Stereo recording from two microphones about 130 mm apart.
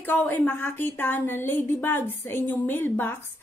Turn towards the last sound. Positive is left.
turn(degrees=15)  # may be behind; listen again after turning